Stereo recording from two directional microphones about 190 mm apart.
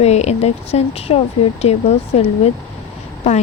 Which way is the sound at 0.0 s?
35° left (ahead or behind).